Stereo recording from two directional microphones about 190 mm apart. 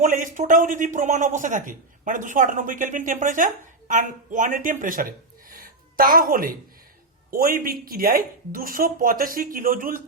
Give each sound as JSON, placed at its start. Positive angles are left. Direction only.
{"t": 0.0, "sound": "speech", "side_deg": -45}